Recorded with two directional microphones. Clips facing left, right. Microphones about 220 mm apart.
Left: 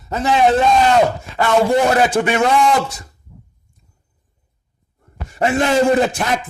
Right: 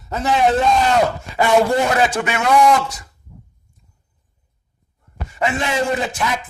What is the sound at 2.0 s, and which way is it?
Music, 30° left (ahead or behind).